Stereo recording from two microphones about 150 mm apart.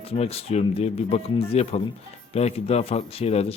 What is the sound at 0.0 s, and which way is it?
Speech, 40° left (ahead or behind).